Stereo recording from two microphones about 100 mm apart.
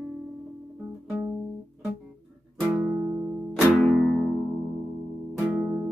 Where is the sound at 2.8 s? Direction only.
15° right (ahead or behind).